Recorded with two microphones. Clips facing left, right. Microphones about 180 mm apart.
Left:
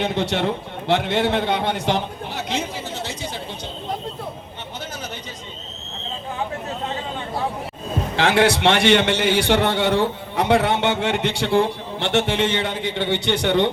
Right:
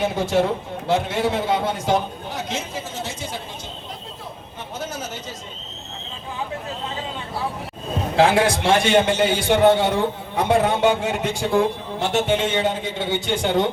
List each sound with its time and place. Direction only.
0.0 s a man's voice: 70° left (ahead or behind)
8.2 s a man's voice: 70° left (ahead or behind)